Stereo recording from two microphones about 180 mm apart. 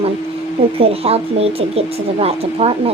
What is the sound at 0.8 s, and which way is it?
A woman's voice, 35° right (ahead or behind).